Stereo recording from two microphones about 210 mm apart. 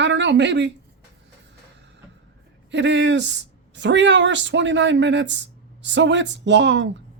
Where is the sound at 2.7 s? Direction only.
60° right (ahead or behind).